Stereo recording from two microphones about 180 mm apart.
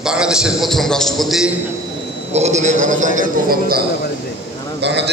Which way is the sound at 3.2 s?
55° right (ahead or behind).